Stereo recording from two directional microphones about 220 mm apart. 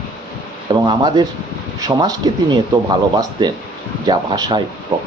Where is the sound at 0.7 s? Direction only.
20° right (ahead or behind).